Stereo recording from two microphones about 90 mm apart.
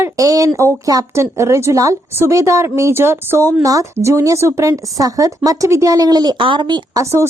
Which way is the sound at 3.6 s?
40° right (ahead or behind).